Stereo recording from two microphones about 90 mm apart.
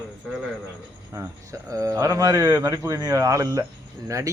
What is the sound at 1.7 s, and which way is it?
A man's voice, 35° right (ahead or behind).